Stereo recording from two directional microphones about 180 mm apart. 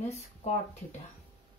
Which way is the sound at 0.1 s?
35° left (ahead or behind).